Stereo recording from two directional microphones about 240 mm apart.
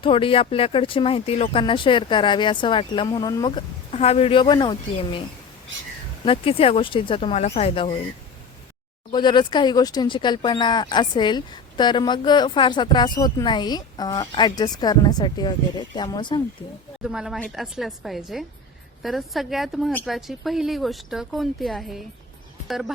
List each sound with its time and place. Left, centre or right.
0.0 s speech: left
6.2 s speech: left
9.1 s speech: centre
17.0 s a woman's voice: centre